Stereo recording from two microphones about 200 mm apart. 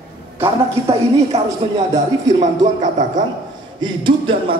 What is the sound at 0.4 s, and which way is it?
Speech, 30° right (ahead or behind).